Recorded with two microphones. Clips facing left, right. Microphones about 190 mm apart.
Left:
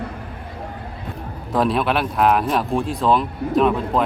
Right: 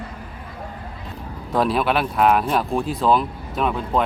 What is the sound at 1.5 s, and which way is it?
A man's voice, centre (ahead or behind).